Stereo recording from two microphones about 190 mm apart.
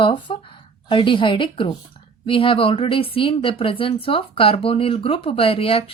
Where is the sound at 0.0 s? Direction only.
25° left (ahead or behind).